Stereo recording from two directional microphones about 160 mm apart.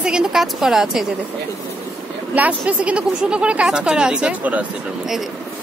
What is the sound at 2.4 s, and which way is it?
A woman's voice, 10° right (ahead or behind).